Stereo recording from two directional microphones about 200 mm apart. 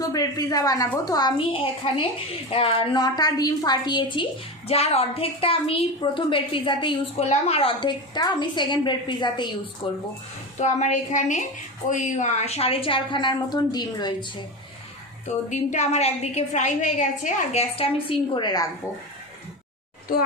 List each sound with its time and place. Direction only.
0.0 s a woman's voice: 20° left (ahead or behind)
10.6 s a woman's voice: 35° left (ahead or behind); by 14.3 s 20° left (ahead or behind)
15.4 s a woman's voice: 35° left (ahead or behind)
18.3 s a woman's voice: 20° left (ahead or behind)